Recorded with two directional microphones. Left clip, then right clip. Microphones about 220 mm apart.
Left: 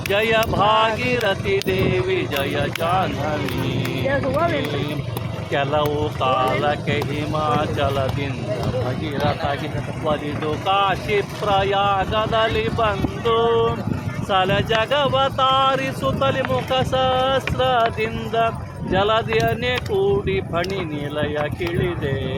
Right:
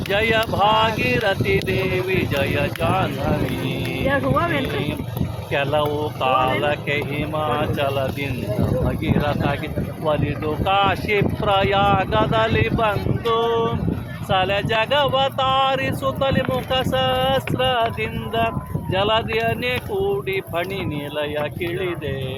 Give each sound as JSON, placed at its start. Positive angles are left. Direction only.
{"t": 0.1, "sound": "speech", "side_deg": 0}
{"t": 4.0, "sound": "speech", "side_deg": -40}
{"t": 5.5, "sound": "speech", "side_deg": -5}
{"t": 10.7, "sound": "speech", "side_deg": -25}